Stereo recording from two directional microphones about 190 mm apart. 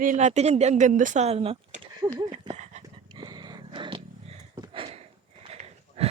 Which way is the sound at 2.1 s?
25° right (ahead or behind).